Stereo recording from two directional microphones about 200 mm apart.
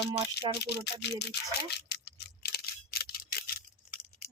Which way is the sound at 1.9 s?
55° left (ahead or behind).